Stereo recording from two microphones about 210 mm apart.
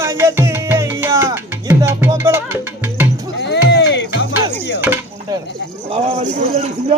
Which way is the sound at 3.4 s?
55° left (ahead or behind).